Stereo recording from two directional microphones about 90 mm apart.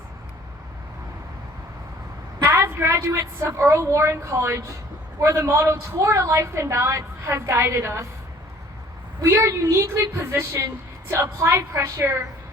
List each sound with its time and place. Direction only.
2.4 s a woman's voice: 25° right (ahead or behind)
9.2 s a woman's voice: 35° right (ahead or behind)